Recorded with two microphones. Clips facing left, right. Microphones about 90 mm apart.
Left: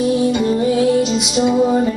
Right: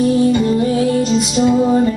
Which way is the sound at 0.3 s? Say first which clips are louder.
Right 1 dB; 10° left (ahead or behind).